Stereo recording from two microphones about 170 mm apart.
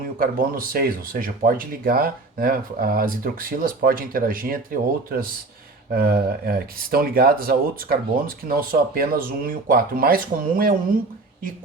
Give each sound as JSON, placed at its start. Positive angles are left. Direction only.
{"t": 0.0, "sound": "speech", "side_deg": -55}